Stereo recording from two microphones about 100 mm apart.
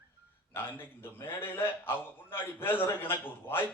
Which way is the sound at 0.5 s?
20° left (ahead or behind).